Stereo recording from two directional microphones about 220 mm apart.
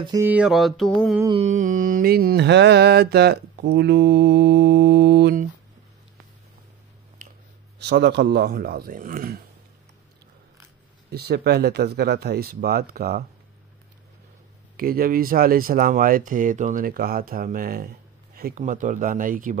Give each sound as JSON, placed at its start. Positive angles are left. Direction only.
{"t": 0.0, "sound": "a sound", "side_deg": -15}
{"t": 1.2, "sound": "mantra", "side_deg": -25}
{"t": 7.9, "sound": "mantra", "side_deg": -50}
{"t": 11.1, "sound": "mantra", "side_deg": -45}
{"t": 14.8, "sound": "speech", "side_deg": -40}